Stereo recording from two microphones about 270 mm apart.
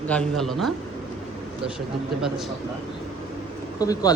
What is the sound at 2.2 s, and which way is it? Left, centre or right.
Speech, centre.